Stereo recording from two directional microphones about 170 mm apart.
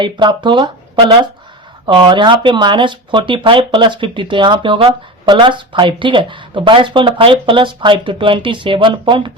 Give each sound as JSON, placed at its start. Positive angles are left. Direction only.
{"t": 0.0, "sound": "speech", "side_deg": -25}